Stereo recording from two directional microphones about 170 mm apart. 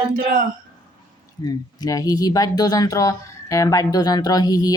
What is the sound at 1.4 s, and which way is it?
Speech, 20° left (ahead or behind).